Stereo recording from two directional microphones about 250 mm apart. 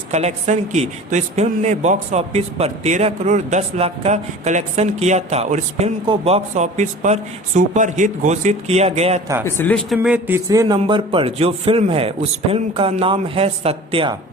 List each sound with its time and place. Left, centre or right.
0.1 s a woman's voice: right
9.4 s a woman's voice: centre; by 14.2 s right